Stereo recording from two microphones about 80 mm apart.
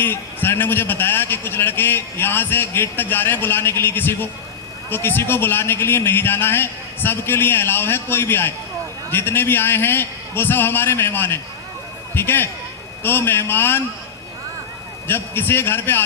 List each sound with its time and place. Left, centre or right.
0.0 s a man's voice: left
15.0 s a man's voice: left